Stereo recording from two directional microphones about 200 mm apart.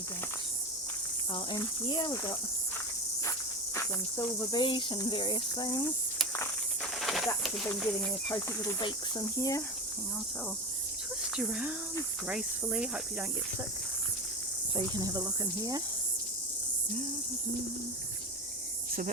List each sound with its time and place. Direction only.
1.3 s speech: 25° left (ahead or behind)
4.2 s speech: 25° left (ahead or behind)
7.0 s a sound: centre (ahead or behind)
7.4 s cricket: centre (ahead or behind)
8.3 s speech: 20° left (ahead or behind)
11.3 s cricket: 5° right (ahead or behind)
14.8 s speech: 20° right (ahead or behind)